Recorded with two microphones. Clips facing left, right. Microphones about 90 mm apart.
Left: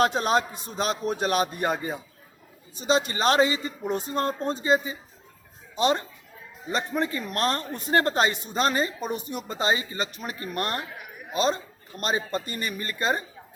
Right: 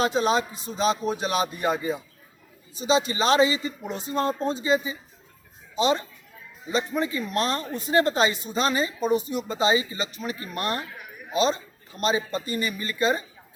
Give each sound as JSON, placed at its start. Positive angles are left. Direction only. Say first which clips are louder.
{"t": 0.0, "sound": "speech", "louder": "even", "side_deg": 50}